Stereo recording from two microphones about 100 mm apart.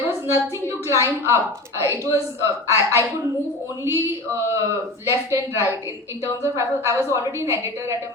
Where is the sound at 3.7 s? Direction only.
30° right (ahead or behind).